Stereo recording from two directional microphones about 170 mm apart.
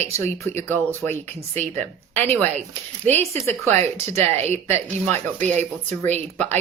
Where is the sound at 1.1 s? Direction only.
40° right (ahead or behind).